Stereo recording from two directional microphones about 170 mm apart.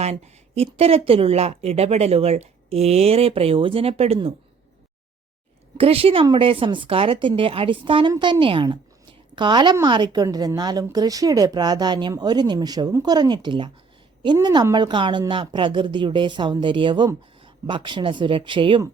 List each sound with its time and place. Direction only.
0.0 s speech: 40° right (ahead or behind)
5.7 s a woman's voice: 35° right (ahead or behind)